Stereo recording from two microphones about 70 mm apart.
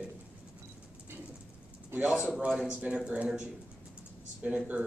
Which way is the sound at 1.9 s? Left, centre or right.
Right.